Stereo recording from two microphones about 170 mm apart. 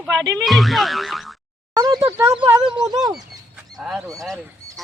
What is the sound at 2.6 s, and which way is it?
Speech, 25° right (ahead or behind).